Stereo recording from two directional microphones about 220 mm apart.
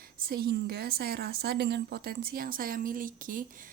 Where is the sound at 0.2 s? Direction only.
45° right (ahead or behind).